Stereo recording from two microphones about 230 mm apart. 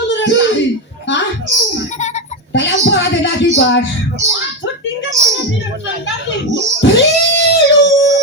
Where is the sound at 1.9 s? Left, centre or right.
Left.